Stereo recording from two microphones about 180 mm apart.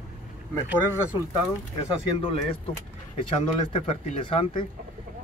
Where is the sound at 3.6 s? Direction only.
30° left (ahead or behind).